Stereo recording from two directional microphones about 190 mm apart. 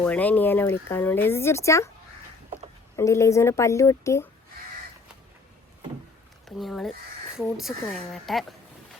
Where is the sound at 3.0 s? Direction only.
15° left (ahead or behind).